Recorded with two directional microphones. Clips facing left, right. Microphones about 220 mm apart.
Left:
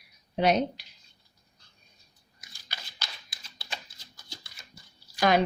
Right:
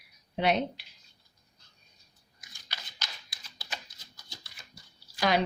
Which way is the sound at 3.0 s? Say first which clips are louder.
Left 1 dB; 30° left (ahead or behind).